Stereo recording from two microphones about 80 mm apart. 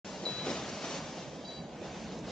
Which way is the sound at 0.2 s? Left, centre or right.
Centre.